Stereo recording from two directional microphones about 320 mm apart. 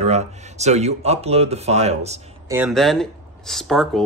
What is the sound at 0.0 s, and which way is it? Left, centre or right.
Speech, right.